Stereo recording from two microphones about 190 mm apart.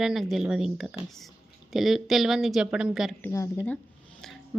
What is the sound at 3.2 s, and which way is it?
Speech, 15° left (ahead or behind).